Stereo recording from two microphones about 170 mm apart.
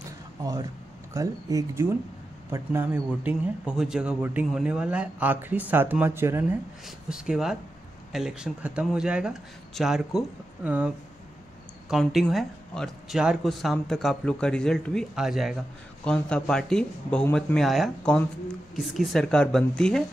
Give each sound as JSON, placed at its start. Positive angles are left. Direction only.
{"t": 0.4, "sound": "speech", "side_deg": -20}
{"t": 11.9, "sound": "speech", "side_deg": 0}